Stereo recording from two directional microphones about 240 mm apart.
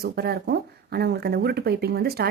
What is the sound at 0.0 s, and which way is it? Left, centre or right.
Speech, right.